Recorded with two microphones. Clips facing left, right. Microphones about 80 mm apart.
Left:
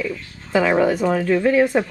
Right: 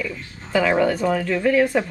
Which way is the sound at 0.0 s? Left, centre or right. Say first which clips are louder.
Left 3 dB; centre.